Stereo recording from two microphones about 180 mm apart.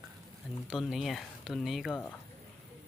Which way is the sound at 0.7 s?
5° right (ahead or behind).